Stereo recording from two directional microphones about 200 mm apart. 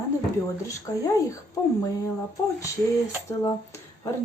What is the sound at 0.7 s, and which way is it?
Speech, 15° left (ahead or behind).